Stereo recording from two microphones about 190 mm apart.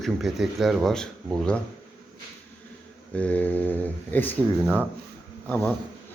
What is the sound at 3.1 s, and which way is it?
Speech, 5° left (ahead or behind).